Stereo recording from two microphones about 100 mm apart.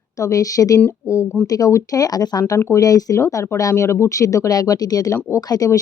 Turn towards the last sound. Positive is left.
turn(degrees=40)  # may be behind; listen again after turning